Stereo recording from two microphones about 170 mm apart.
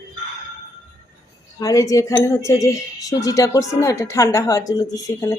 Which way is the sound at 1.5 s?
20° left (ahead or behind).